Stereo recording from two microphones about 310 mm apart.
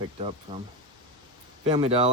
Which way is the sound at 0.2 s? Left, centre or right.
Centre.